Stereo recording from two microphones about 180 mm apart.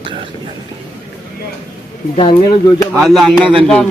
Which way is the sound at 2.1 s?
35° left (ahead or behind).